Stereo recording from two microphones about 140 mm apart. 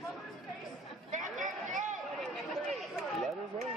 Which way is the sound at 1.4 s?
60° right (ahead or behind).